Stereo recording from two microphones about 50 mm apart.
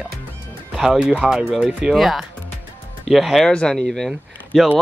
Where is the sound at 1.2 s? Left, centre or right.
Centre.